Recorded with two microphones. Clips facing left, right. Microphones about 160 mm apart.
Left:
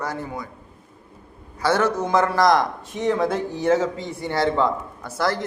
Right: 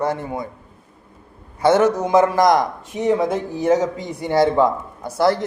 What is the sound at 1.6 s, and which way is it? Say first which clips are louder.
A man's voice: right 5 dB; 20° right (ahead or behind).